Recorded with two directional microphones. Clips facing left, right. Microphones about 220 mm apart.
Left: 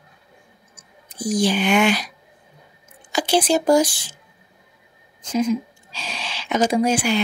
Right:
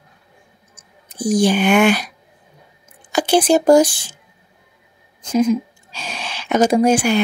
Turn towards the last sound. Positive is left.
turn(degrees=-45)  # may be behind; listen again after turning